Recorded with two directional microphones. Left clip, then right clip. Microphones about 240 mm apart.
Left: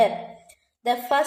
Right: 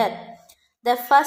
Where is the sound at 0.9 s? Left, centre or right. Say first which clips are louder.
Right 5 dB; right.